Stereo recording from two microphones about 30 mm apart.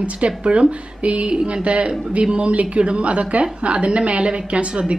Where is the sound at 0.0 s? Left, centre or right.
Right.